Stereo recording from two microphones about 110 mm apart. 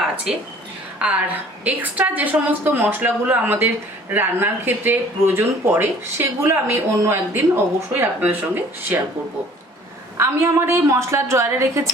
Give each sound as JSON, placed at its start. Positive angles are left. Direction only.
{"t": 1.0, "sound": "a woman's voice", "side_deg": -10}
{"t": 10.2, "sound": "speech", "side_deg": -25}